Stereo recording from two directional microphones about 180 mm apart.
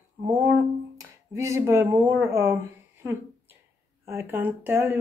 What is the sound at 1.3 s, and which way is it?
A woman's voice, 15° right (ahead or behind).